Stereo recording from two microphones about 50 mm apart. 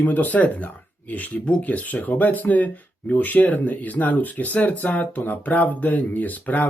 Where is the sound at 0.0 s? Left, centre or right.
Left.